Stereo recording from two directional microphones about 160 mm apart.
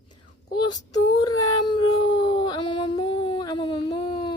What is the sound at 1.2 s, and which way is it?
Dog, 25° left (ahead or behind).